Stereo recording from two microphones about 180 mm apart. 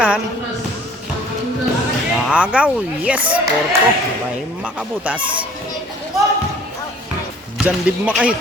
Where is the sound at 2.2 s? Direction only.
5° right (ahead or behind).